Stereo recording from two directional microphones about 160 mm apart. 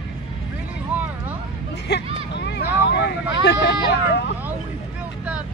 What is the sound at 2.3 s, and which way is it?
Vehicle, 90° left.